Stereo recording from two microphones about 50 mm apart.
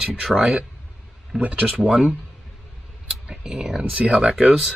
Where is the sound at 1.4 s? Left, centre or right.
Right.